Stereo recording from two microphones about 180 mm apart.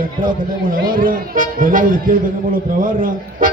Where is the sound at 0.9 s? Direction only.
50° right (ahead or behind).